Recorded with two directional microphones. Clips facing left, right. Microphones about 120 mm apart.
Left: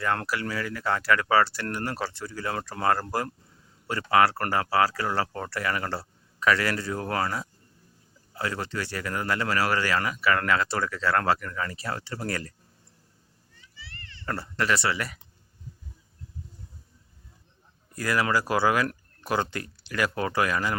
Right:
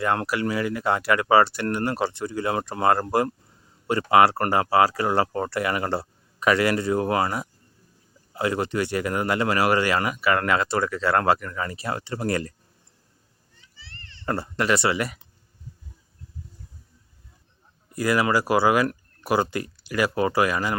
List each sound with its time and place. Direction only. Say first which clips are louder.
0.0 s speech: right 4 dB; 20° right (ahead or behind)
13.7 s cat: left 1 dB; 30° right (ahead or behind)
17.9 s speech: right 4 dB; 10° right (ahead or behind)